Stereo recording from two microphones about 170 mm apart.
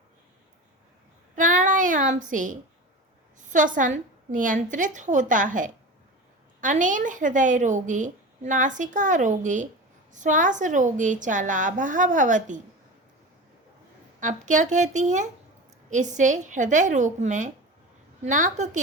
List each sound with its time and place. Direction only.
1.4 s child singing: 50° right (ahead or behind)
3.5 s a woman's voice: 50° right (ahead or behind)
14.2 s a woman's voice: 45° right (ahead or behind)